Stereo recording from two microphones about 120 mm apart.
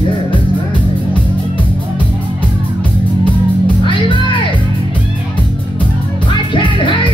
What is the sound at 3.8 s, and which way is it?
Music, 45° left (ahead or behind).